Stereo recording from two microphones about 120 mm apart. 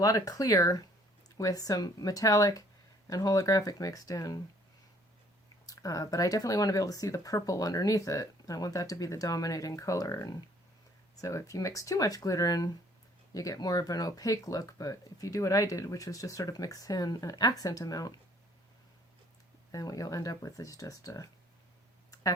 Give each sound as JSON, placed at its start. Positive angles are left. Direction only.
{"t": 0.0, "sound": "speech", "side_deg": 30}
{"t": 5.6, "sound": "speech", "side_deg": 30}
{"t": 19.7, "sound": "speech", "side_deg": 30}